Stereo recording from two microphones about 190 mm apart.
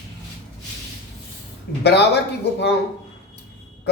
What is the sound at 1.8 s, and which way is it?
Speech, 60° left (ahead or behind).